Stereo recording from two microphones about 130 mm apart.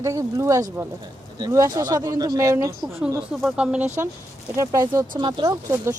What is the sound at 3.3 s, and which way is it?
Speech, 5° right (ahead or behind).